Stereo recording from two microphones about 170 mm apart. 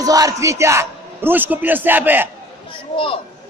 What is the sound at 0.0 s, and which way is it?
A man's voice, 20° right (ahead or behind).